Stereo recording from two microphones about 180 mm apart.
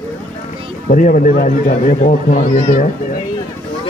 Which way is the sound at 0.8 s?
45° left (ahead or behind).